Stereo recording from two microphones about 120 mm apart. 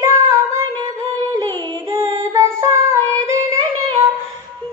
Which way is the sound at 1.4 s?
35° right (ahead or behind).